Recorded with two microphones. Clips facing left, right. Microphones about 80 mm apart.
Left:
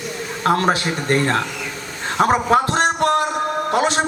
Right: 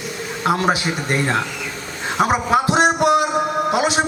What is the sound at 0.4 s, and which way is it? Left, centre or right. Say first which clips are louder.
A man's voice: left 1 dB; centre.